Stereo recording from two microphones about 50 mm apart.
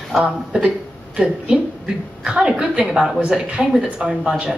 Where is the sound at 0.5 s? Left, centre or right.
Right.